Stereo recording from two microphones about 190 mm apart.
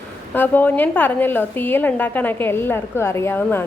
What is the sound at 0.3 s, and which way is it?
A woman's voice, 10° left (ahead or behind).